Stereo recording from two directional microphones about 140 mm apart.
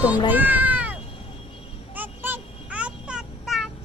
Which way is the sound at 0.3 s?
10° right (ahead or behind).